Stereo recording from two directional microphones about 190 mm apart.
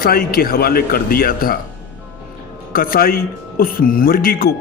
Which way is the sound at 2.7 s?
50° left (ahead or behind).